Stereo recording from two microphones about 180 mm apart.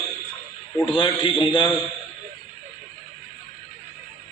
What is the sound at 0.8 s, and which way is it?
Speech, 30° left (ahead or behind).